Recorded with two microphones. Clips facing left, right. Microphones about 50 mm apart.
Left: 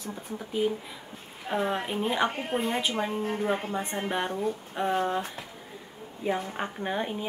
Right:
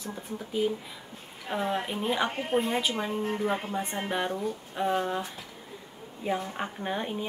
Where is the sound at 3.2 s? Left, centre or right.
Left.